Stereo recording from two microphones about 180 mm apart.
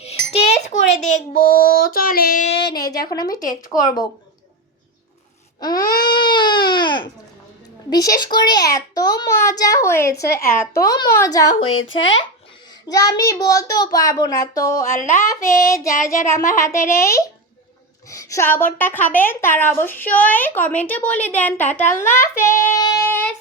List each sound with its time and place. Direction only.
0.0 s a sound: 35° left (ahead or behind)
1.0 s child singing: 45° left (ahead or behind)
2.5 s child singing: 30° left (ahead or behind)
3.1 s a child's voice: 20° left (ahead or behind)
5.5 s a sound: 20° left (ahead or behind)
6.0 s baby cry: 25° left (ahead or behind)
7.9 s a child's voice: 20° left (ahead or behind)
11.9 s speech: 90° left
12.9 s a child's voice: 20° left (ahead or behind)
14.9 s child singing: 40° left (ahead or behind)
15.3 s a woman's voice: 20° left (ahead or behind)